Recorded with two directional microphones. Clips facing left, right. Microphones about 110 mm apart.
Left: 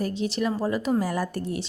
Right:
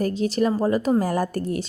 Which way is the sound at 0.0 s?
45° right (ahead or behind).